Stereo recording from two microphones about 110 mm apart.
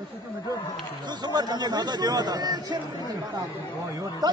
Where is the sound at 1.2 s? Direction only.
40° right (ahead or behind).